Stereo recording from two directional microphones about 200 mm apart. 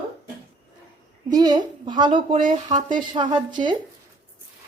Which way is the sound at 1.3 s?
20° right (ahead or behind).